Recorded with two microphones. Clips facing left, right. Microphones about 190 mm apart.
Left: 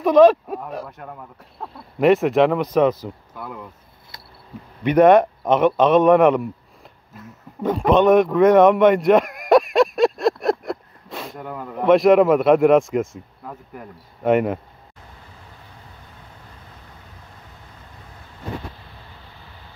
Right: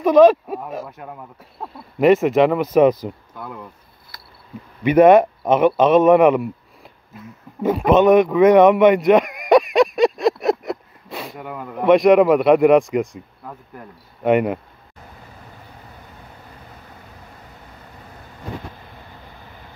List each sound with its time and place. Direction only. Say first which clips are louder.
0.0 s speech: right 1 dB; centre (ahead or behind)
3.3 s speech: even; centre (ahead or behind)
4.1 s insect: left 1 dB; 25° left (ahead or behind)
4.8 s a man's voice: right 2 dB; 5° right (ahead or behind)